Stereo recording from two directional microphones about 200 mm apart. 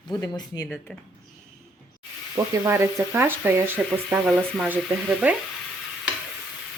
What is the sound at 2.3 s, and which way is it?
Speech, 15° right (ahead or behind).